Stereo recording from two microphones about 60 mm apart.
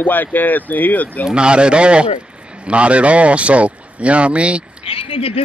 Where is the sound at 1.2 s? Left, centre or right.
Centre.